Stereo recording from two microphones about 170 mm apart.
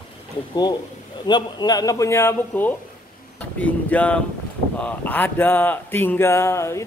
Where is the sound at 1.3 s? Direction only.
25° left (ahead or behind).